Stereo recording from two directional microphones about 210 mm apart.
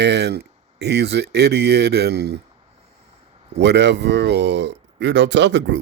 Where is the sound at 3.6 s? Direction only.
55° right (ahead or behind).